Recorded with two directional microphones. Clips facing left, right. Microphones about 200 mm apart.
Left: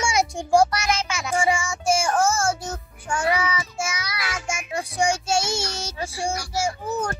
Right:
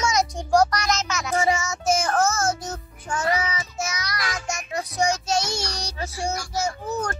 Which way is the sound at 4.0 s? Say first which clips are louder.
Right 1 dB; 10° left (ahead or behind).